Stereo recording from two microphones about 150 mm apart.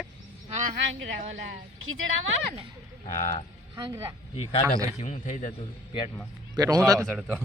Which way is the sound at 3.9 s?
20° right (ahead or behind).